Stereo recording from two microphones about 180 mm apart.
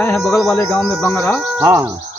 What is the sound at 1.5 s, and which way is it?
Speech, 15° right (ahead or behind).